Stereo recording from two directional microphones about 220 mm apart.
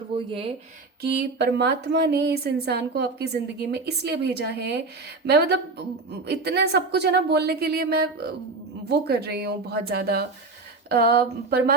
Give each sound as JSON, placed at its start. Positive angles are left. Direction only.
{"t": 0.1, "sound": "speech", "side_deg": -25}
{"t": 1.2, "sound": "a woman's voice", "side_deg": -50}